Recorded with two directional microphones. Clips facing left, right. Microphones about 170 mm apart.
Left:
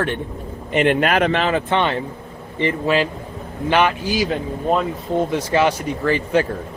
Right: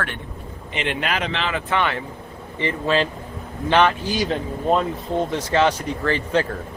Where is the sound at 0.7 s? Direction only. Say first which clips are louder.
Left 8 dB; 50° left (ahead or behind).